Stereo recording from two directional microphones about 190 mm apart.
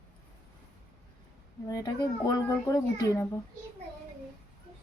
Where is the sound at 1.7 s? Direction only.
20° left (ahead or behind).